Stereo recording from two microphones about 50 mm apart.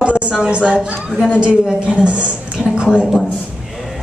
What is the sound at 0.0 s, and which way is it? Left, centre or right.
A woman's voice, right.